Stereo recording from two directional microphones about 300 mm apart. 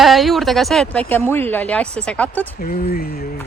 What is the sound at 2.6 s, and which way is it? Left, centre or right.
Speech, left.